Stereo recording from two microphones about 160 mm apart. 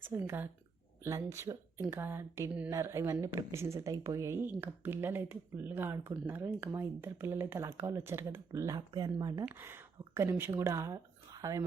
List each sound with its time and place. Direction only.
0.0 s a woman's voice: 15° right (ahead or behind)